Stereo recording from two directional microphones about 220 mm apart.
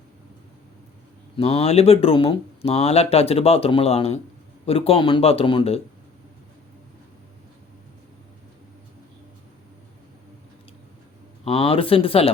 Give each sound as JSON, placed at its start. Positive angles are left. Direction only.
{"t": 1.4, "sound": "speech", "side_deg": 25}
{"t": 11.4, "sound": "speech", "side_deg": 25}